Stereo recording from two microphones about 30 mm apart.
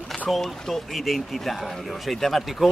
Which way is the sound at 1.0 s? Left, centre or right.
Centre.